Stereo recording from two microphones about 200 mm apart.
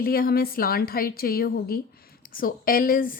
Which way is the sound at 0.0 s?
50° left (ahead or behind).